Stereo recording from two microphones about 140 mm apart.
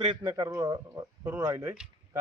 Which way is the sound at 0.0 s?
35° right (ahead or behind).